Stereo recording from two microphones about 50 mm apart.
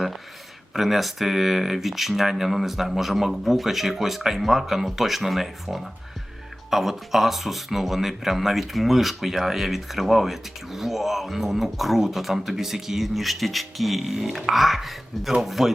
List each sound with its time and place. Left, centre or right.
0.7 s speech: centre